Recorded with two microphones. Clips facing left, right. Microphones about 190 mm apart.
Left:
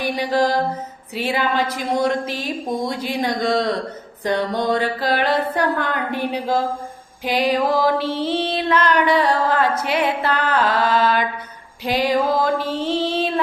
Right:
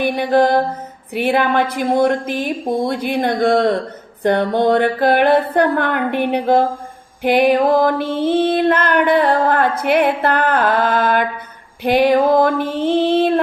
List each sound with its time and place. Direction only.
0.0 s a woman's voice: 55° right (ahead or behind)
7.2 s music: 60° right (ahead or behind)
11.8 s a woman's voice: 60° right (ahead or behind)